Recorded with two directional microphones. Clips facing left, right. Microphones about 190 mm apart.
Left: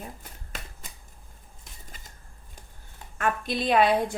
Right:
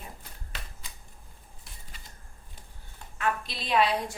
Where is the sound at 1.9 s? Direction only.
45° left (ahead or behind).